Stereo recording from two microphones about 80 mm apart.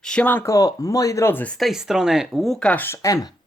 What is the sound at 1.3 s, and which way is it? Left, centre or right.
Speech, left.